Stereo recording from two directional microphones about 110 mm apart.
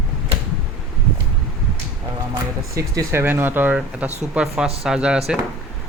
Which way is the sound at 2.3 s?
30° right (ahead or behind).